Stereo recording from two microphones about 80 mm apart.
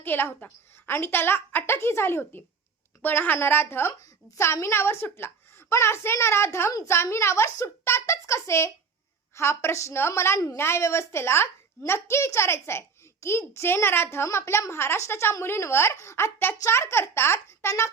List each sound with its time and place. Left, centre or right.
0.0 s a woman's voice: left